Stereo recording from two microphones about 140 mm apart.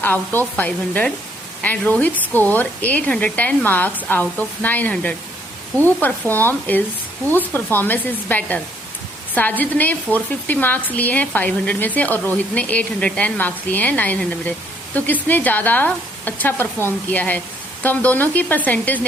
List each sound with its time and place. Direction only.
0.0 s speech: 15° left (ahead or behind)